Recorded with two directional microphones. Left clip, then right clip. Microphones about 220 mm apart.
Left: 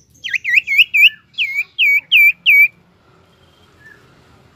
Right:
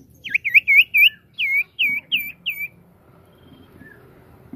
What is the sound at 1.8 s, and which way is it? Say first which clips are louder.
Bird: left 8 dB; 30° left (ahead or behind).